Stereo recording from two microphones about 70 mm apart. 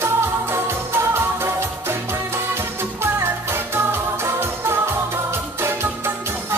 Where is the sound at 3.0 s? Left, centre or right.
Right.